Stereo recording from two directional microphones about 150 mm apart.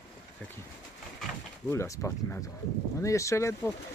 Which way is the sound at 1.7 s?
20° left (ahead or behind).